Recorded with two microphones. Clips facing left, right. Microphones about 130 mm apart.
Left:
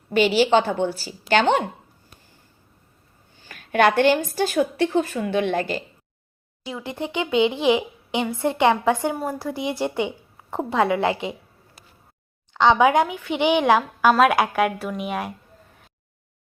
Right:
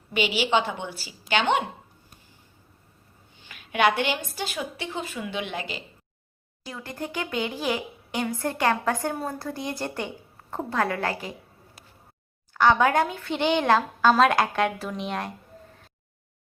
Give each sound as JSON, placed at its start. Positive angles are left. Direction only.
{"t": 0.1, "sound": "a woman's voice", "side_deg": 40}
{"t": 3.5, "sound": "a woman's voice", "side_deg": 45}
{"t": 6.7, "sound": "a child's voice", "side_deg": 15}
{"t": 12.5, "sound": "a woman's voice", "side_deg": 15}